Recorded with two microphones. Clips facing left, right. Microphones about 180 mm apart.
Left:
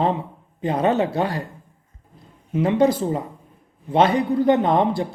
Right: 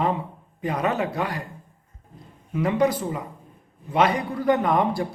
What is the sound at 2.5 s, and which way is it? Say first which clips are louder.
Speech: left 4 dB; 25° left (ahead or behind).